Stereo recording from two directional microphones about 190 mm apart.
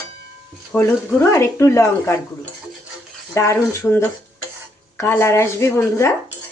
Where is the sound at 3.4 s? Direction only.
15° left (ahead or behind).